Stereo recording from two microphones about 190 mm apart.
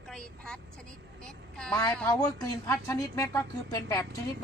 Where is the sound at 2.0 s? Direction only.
15° left (ahead or behind).